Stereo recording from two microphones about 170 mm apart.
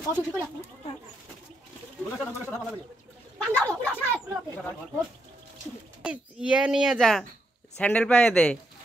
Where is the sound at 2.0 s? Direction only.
Centre (ahead or behind).